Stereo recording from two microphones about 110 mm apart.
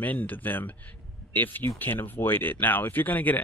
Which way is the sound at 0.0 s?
15° left (ahead or behind).